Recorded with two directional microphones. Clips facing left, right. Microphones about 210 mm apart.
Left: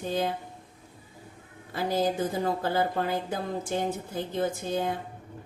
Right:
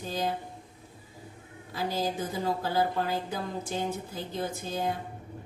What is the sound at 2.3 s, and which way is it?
A woman's voice, 55° left (ahead or behind).